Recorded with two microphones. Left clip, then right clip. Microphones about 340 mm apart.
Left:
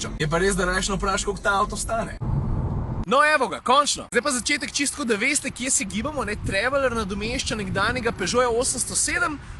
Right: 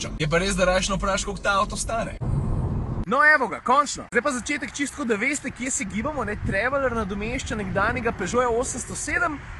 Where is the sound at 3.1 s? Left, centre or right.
Centre.